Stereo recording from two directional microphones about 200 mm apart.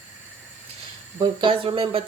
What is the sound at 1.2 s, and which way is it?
Speech, 25° right (ahead or behind).